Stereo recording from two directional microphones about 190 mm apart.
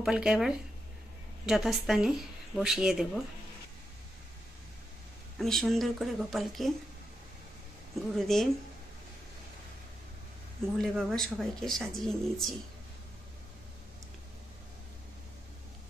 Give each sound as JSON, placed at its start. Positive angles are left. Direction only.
{"t": 0.0, "sound": "speech", "side_deg": -5}
{"t": 5.4, "sound": "speech", "side_deg": 0}
{"t": 8.2, "sound": "speech", "side_deg": 0}
{"t": 10.8, "sound": "speech", "side_deg": 0}